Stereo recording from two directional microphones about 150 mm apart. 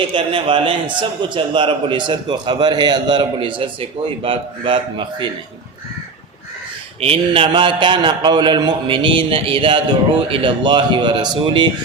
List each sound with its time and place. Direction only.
0.1 s a man's voice: 35° right (ahead or behind)
7.0 s a man's voice: 40° right (ahead or behind)